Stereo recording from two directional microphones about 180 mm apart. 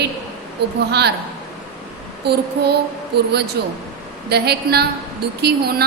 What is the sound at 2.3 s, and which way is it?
A woman's voice, 65° right (ahead or behind).